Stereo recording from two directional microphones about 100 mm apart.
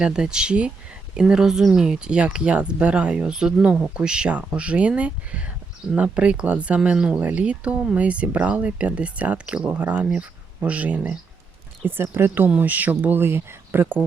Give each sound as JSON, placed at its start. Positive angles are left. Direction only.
{"t": 0.0, "sound": "speech", "side_deg": -10}